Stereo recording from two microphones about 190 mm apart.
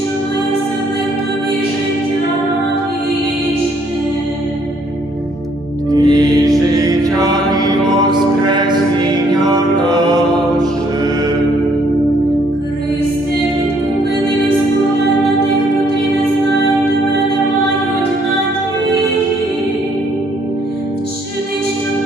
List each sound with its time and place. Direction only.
5.9 s music: 20° right (ahead or behind)